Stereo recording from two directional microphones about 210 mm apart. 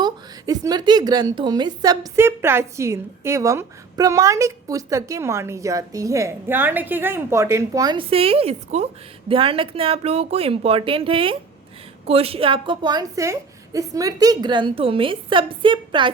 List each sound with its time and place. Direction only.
0.0 s a woman's voice: 15° right (ahead or behind)